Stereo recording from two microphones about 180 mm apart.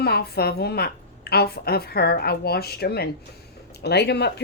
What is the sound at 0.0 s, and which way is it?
A woman's voice, 60° left (ahead or behind).